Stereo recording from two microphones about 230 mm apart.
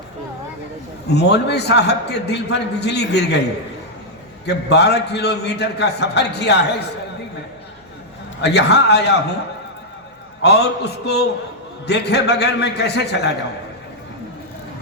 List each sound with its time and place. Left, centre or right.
1.1 s a man's voice: left
4.4 s a man's voice: left
8.4 s a man's voice: left
10.4 s a man's voice: left